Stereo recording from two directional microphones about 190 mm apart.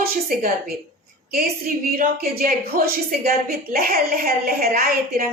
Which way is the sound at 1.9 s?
50° right (ahead or behind).